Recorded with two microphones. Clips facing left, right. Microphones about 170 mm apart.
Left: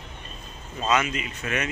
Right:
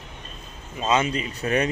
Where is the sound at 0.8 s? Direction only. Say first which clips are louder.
Right 2 dB; 30° right (ahead or behind).